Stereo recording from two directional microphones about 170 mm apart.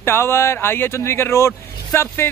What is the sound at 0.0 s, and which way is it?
Speech, 15° left (ahead or behind).